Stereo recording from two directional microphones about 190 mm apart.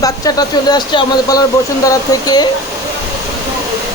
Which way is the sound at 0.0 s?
20° left (ahead or behind).